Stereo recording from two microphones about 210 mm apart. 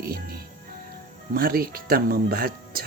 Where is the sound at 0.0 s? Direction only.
45° right (ahead or behind).